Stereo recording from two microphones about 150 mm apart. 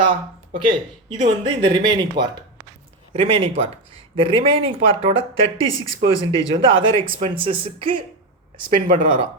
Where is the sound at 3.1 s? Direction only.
40° right (ahead or behind).